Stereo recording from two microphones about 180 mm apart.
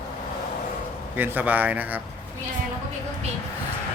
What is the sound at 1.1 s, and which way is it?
Speech, 10° right (ahead or behind).